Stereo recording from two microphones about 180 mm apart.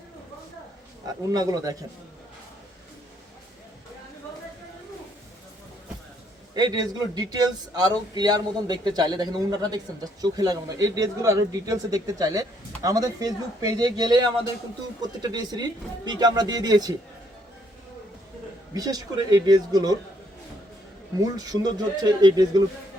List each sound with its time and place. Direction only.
1.0 s a man's voice: 20° right (ahead or behind)
6.5 s a man's voice: 20° right (ahead or behind)
18.7 s a man's voice: 20° right (ahead or behind)
21.3 s a man's voice: 20° right (ahead or behind)